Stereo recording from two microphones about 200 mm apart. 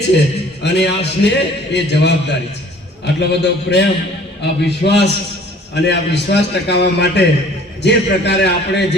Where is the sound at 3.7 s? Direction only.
55° left (ahead or behind).